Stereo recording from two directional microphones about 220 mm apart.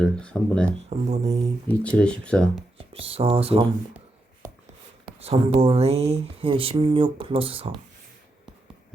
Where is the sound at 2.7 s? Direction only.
25° right (ahead or behind).